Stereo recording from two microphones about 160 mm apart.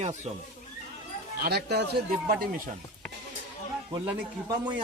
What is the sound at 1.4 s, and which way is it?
Speech, 85° right.